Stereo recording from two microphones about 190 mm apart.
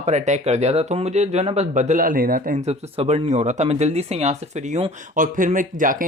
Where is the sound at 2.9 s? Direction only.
35° right (ahead or behind).